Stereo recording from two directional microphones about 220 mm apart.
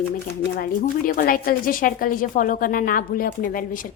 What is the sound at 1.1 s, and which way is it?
Speech, 40° left (ahead or behind).